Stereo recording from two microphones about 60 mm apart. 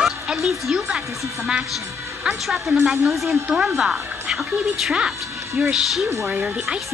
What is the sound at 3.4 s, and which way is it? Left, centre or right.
A woman's voice, centre.